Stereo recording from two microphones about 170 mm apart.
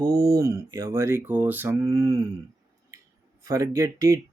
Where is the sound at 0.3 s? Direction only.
20° right (ahead or behind).